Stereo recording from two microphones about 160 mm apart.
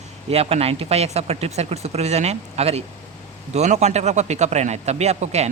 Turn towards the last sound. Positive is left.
turn(degrees=-45)  # may be behind; listen again after turning